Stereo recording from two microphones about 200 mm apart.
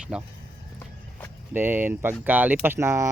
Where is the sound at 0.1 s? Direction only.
5° right (ahead or behind).